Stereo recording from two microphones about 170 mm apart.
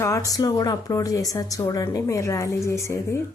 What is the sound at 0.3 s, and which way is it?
Speech, 20° left (ahead or behind).